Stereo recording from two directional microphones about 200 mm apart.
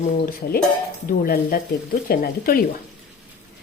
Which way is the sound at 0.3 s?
45° left (ahead or behind).